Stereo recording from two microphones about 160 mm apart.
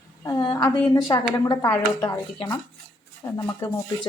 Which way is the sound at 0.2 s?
25° left (ahead or behind).